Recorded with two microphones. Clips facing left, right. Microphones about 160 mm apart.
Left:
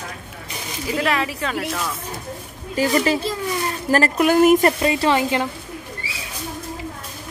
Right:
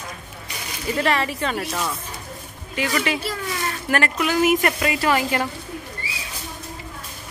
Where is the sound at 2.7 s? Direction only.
35° left (ahead or behind).